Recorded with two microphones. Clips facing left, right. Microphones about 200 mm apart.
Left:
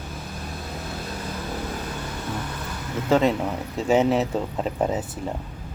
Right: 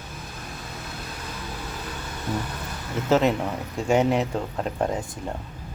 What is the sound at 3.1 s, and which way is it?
Speech, centre (ahead or behind).